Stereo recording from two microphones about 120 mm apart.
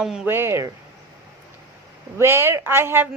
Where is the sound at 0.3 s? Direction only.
20° right (ahead or behind).